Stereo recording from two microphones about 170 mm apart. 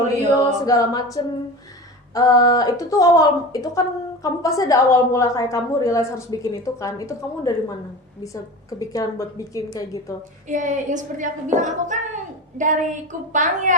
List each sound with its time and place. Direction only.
0.3 s a woman's voice: 20° left (ahead or behind)
8.8 s a woman's voice: 20° left (ahead or behind)
10.5 s a woman's voice: 45° right (ahead or behind)